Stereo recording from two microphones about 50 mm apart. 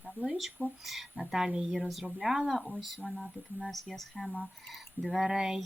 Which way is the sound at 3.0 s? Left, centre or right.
Right.